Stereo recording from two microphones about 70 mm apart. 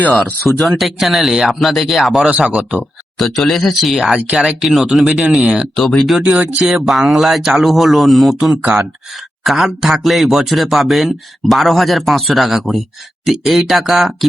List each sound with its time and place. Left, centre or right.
0.1 s speech: centre
3.2 s speech: centre
5.7 s speech: centre
6.2 s speech: centre
9.4 s speech: centre